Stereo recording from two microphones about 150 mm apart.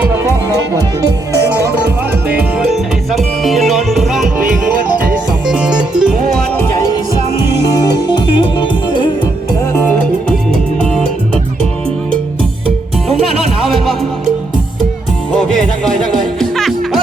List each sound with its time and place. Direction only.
3.1 s music: centre (ahead or behind)
7.7 s music: 25° left (ahead or behind)
9.7 s music: 10° left (ahead or behind)
16.4 s music: centre (ahead or behind)